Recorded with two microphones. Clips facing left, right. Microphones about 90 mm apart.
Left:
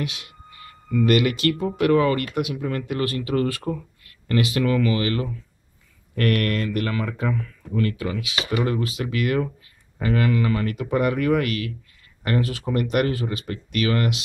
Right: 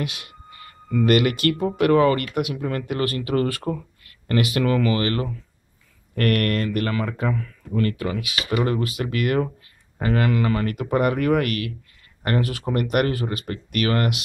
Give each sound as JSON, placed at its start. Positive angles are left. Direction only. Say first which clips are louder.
{"t": 0.0, "sound": "speech", "louder": "even", "side_deg": -55}